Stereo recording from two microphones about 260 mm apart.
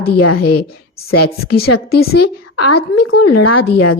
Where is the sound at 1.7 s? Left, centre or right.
Left.